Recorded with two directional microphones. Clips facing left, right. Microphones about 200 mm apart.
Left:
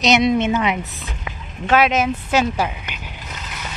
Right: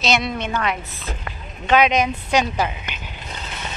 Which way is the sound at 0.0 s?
20° left (ahead or behind).